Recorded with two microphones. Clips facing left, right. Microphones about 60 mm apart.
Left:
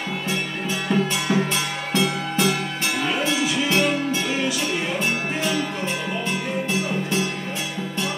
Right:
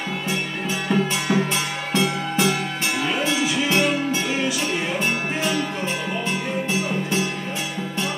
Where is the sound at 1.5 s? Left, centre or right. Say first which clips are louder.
Even; centre.